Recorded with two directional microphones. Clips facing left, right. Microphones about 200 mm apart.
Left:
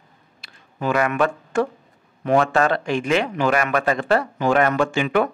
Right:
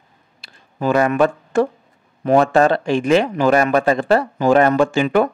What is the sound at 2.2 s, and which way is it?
Speech, 35° right (ahead or behind).